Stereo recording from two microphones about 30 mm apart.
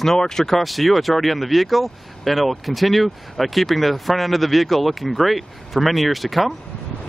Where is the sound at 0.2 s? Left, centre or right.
Centre.